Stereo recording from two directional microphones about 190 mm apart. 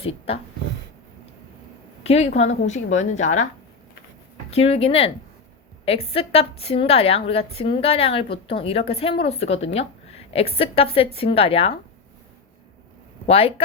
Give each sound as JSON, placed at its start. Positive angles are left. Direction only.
{"t": 0.0, "sound": "speech", "side_deg": 30}
{"t": 2.0, "sound": "a woman's voice", "side_deg": 35}
{"t": 4.5, "sound": "a woman's voice", "side_deg": 30}
{"t": 13.2, "sound": "speech", "side_deg": 30}